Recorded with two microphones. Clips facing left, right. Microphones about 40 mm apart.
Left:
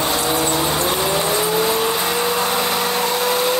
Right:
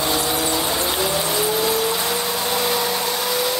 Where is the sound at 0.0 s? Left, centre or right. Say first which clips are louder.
Left 2 dB; left.